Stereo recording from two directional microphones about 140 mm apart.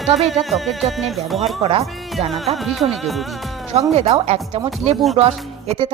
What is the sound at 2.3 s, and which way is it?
Music, centre (ahead or behind).